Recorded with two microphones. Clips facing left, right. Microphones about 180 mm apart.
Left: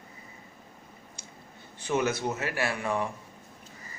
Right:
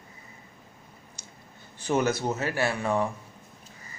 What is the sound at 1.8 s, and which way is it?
Speech, 40° right (ahead or behind).